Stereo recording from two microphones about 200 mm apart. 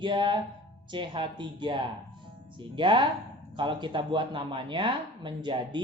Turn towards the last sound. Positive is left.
turn(degrees=-25)  # may be behind; listen again after turning